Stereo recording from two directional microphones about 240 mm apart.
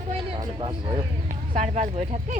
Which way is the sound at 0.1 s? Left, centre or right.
Right.